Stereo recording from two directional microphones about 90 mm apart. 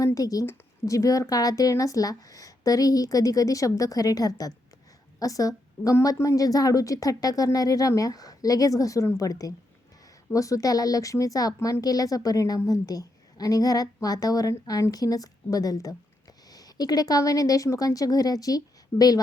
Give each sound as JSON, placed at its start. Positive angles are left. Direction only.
{"t": 0.0, "sound": "a woman's voice", "side_deg": 40}